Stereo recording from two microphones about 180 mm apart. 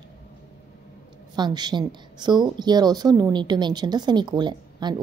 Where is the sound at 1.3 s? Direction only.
25° right (ahead or behind).